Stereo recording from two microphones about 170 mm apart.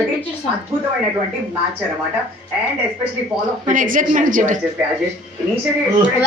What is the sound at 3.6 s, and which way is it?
Speech, 50° right (ahead or behind).